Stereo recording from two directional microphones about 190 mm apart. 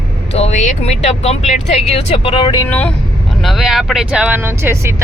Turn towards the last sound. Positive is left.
turn(degrees=-15)  # may be behind; listen again after turning